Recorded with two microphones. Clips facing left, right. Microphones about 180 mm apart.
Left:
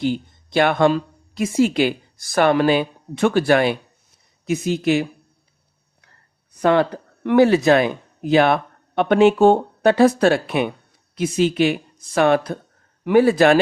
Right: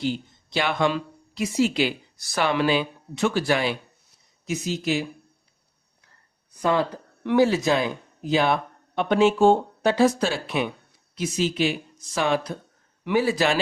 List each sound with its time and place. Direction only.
0.0 s speech: 55° left (ahead or behind)
6.6 s speech: 65° left (ahead or behind)